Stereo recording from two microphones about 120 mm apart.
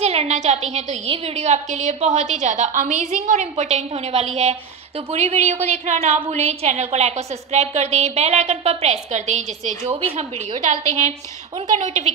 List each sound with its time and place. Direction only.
0.0 s a woman's voice: 60° right (ahead or behind)
1.0 s a woman's voice: 55° right (ahead or behind)
10.1 s a woman's voice: 85° right
11.8 s a woman's voice: 70° right (ahead or behind)